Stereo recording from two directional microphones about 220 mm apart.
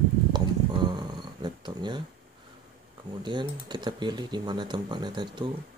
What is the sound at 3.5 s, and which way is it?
Speech, 20° right (ahead or behind).